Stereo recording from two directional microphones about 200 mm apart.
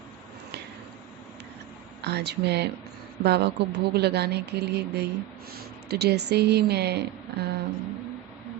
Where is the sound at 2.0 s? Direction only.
55° right (ahead or behind).